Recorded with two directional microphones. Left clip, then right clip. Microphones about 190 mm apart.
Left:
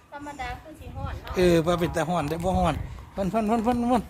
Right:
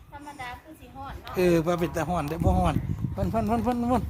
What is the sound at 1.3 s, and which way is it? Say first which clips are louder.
Speech: left 2 dB; 10° right (ahead or behind).